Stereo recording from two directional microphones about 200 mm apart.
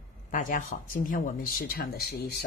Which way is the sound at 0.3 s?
40° left (ahead or behind).